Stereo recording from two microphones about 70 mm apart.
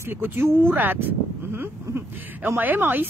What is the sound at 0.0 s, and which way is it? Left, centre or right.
A woman's voice, right.